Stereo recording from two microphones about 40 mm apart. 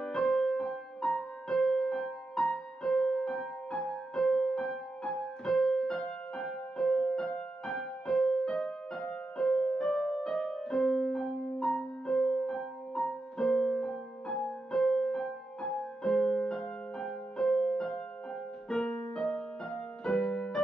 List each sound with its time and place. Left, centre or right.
0.0 s music: centre
14.8 s music: centre